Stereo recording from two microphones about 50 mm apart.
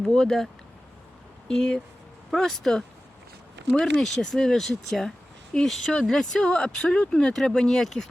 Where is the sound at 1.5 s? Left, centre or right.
Centre.